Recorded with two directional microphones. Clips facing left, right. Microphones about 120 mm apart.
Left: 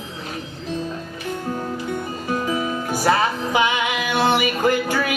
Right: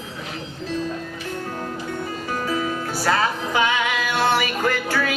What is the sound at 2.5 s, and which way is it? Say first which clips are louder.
Music: left 1 dB; 15° left (ahead or behind).